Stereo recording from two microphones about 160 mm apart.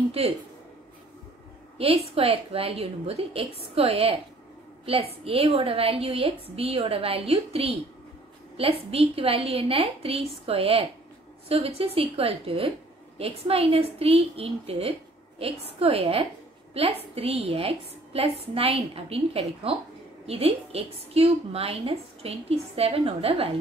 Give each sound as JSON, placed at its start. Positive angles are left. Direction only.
{"t": 1.8, "sound": "a woman's voice", "side_deg": -35}
{"t": 8.9, "sound": "a woman's voice", "side_deg": -35}